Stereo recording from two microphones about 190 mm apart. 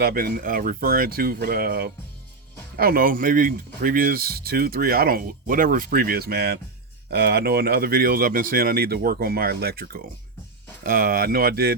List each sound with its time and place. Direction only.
0.0 s speech: 55° right (ahead or behind)